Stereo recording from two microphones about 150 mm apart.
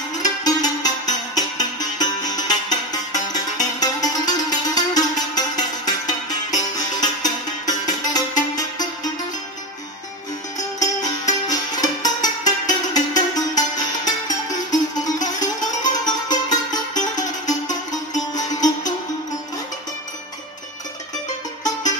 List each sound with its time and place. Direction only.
0.4 s music: 25° left (ahead or behind)
10.8 s music: 25° left (ahead or behind)